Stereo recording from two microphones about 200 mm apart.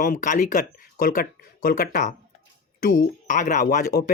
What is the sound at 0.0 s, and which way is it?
Speech, 40° left (ahead or behind).